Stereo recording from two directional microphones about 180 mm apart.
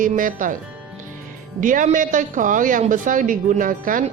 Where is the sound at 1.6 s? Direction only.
45° right (ahead or behind).